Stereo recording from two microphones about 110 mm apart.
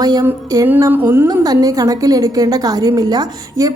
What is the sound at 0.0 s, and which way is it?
Speech, 35° right (ahead or behind).